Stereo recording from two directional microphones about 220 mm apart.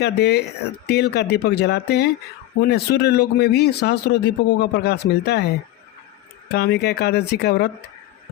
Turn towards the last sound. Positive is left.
turn(degrees=50)  # may be behind; listen again after turning